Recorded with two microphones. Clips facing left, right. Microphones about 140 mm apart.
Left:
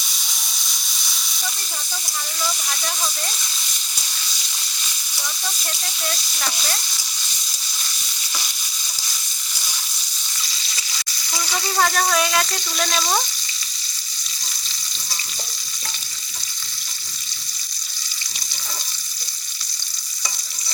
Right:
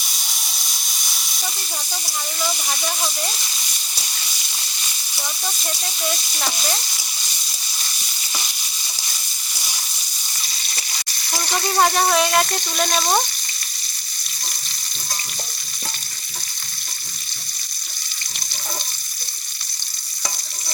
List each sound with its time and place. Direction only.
2.4 s speech: 10° right (ahead or behind)
11.3 s frying: 55° right (ahead or behind)
11.8 s speech: 25° right (ahead or behind)